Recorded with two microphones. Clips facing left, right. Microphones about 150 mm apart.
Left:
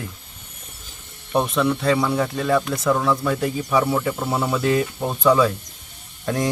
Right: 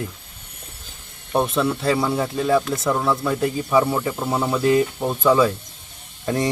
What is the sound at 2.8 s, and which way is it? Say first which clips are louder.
Speech: left 1 dB; 5° right (ahead or behind).